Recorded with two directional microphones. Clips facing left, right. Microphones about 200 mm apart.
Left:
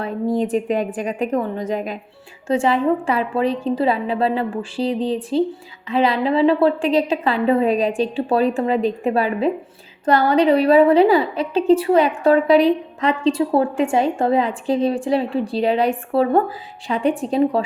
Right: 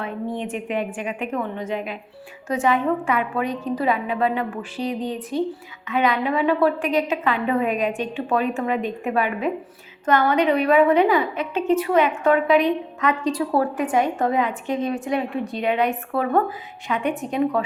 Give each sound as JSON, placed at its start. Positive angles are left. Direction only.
{"t": 0.0, "sound": "a woman's voice", "side_deg": 35}
{"t": 2.5, "sound": "a woman's voice", "side_deg": 30}